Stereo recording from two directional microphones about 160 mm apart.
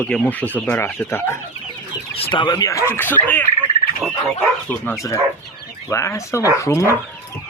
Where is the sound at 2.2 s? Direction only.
35° left (ahead or behind); by 3.4 s 10° left (ahead or behind).